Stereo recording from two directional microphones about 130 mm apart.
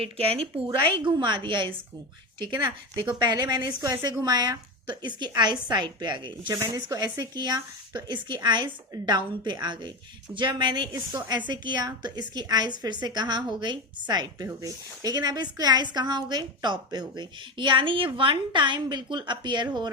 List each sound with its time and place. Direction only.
0.0 s a woman's voice: 50° right (ahead or behind)
1.2 s speech: 40° right (ahead or behind)